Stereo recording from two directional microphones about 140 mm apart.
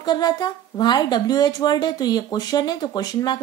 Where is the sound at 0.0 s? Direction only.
30° left (ahead or behind).